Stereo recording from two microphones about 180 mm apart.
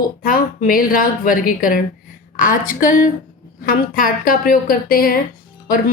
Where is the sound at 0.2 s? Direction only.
50° left (ahead or behind).